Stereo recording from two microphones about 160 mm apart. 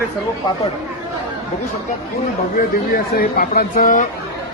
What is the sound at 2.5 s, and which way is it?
Speech, 65° left (ahead or behind).